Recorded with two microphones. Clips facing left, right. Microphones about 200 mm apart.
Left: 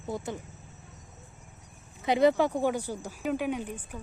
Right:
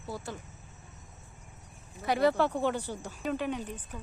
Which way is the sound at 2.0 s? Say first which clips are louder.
Left 3 dB; 20° left (ahead or behind).